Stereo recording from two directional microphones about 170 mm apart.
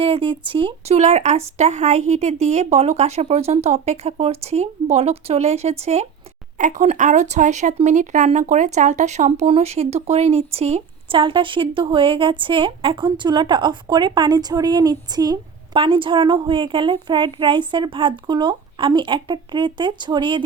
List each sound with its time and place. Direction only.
0.0 s speech: 35° right (ahead or behind)